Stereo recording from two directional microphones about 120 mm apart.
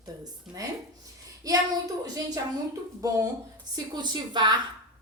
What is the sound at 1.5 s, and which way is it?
Speech, 30° right (ahead or behind).